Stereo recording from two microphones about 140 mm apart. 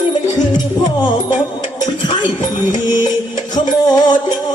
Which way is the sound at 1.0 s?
35° left (ahead or behind).